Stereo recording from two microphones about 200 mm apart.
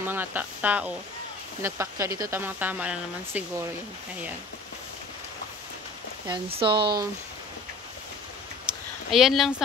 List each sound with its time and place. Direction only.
0.0 s speech: 10° right (ahead or behind)
6.2 s speech: 25° right (ahead or behind)
9.1 s speech: centre (ahead or behind)